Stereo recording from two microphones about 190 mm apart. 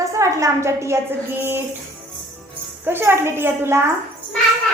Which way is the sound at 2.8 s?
10° right (ahead or behind).